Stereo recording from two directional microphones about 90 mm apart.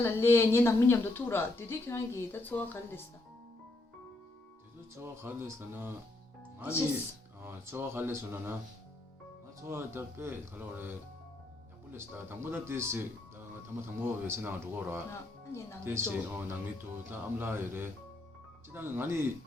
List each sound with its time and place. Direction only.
0.0 s speech: 30° left (ahead or behind)
4.9 s speech: 25° right (ahead or behind)
7.4 s speech: 25° right (ahead or behind)
9.6 s speech: 30° right (ahead or behind)
15.1 s speech: 30° left (ahead or behind)
15.8 s speech: 30° right (ahead or behind)